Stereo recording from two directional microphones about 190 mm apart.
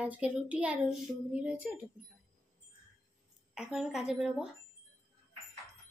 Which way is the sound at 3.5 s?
5° right (ahead or behind).